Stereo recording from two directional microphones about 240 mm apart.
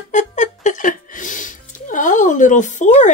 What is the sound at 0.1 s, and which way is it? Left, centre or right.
Speech, left.